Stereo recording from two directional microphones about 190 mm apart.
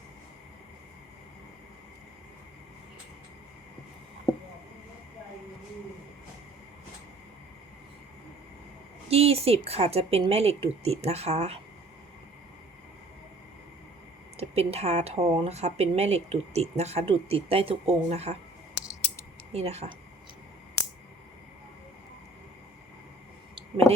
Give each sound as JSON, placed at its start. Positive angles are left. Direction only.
{"t": 9.0, "sound": "speech", "side_deg": -30}
{"t": 14.3, "sound": "speech", "side_deg": -35}
{"t": 19.5, "sound": "speech", "side_deg": -35}
{"t": 23.9, "sound": "speech", "side_deg": 15}